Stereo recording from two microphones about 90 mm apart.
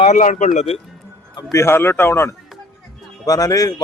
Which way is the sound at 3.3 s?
45° left (ahead or behind).